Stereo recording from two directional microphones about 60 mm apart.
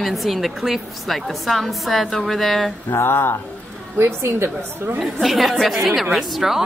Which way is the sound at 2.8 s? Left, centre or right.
Left.